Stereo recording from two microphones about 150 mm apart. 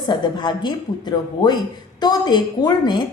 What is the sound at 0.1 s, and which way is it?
Speech, 30° left (ahead or behind).